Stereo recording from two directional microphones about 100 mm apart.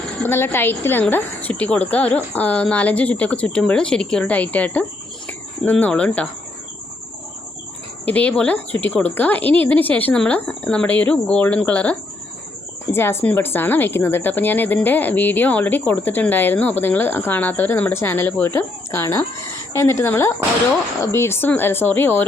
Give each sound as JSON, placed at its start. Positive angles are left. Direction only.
{"t": 0.2, "sound": "speech", "side_deg": 20}
{"t": 8.0, "sound": "speech", "side_deg": 15}
{"t": 12.9, "sound": "speech", "side_deg": 25}